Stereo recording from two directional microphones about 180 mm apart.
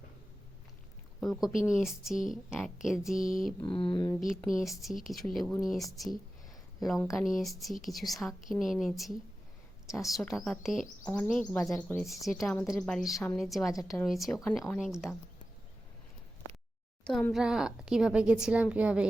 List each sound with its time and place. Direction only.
1.2 s a woman's voice: centre (ahead or behind)
3.6 s mantra: 30° left (ahead or behind)
4.6 s a woman's voice: centre (ahead or behind)
17.1 s a woman's voice: centre (ahead or behind)